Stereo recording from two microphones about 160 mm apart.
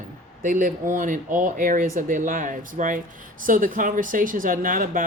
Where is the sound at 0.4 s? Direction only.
55° right (ahead or behind).